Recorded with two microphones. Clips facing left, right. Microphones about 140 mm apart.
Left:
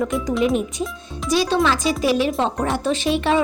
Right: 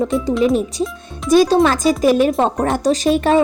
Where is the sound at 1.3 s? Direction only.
45° right (ahead or behind).